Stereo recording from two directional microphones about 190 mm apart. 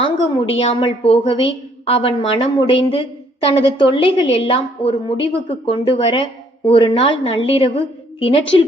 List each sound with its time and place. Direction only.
0.0 s a woman's voice: 30° left (ahead or behind)